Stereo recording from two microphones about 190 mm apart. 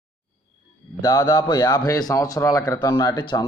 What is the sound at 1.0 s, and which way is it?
A man's voice, 20° left (ahead or behind).